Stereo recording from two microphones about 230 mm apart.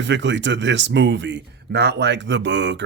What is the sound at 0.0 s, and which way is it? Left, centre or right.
A man's voice, right.